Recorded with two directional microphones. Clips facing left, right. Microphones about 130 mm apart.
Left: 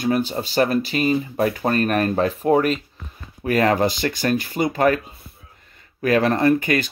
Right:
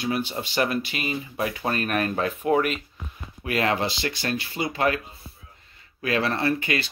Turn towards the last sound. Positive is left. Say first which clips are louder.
# left 7 dB
turn(degrees=45)  # may be behind; listen again after turning